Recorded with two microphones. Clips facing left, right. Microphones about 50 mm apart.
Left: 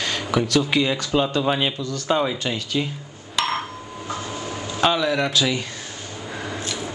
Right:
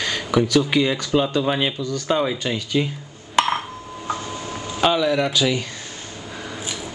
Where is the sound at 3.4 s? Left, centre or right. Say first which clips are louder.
Right 5 dB; right.